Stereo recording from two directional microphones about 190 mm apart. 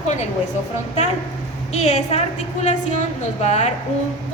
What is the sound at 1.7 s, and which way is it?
A woman's voice, 35° left (ahead or behind).